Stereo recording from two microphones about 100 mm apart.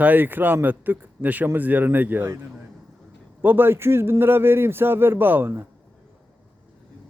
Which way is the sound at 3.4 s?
20° right (ahead or behind).